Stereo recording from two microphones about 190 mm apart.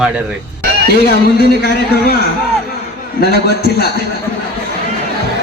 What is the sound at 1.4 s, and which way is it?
Speech, 55° left (ahead or behind).